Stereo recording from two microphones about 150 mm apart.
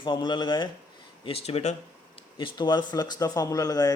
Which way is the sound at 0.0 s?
30° left (ahead or behind).